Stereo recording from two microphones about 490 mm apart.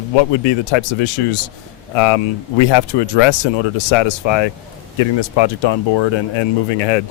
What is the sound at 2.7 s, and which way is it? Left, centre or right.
Speech, left.